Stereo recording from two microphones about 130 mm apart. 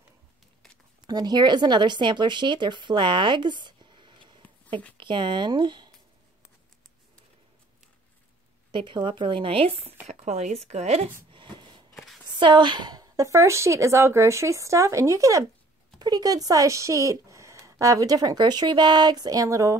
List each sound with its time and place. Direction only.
1.0 s a woman's voice: 30° right (ahead or behind)
8.7 s a woman's voice: 40° right (ahead or behind)
10.0 s speech: 60° right (ahead or behind)
11.3 s a sound: 40° right (ahead or behind)
11.9 s a sound: centre (ahead or behind)
12.3 s speech: 40° right (ahead or behind)